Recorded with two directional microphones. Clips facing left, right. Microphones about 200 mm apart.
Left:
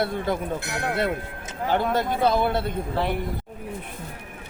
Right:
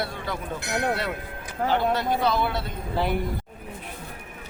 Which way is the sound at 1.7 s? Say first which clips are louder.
Left 1 dB; 50° left (ahead or behind).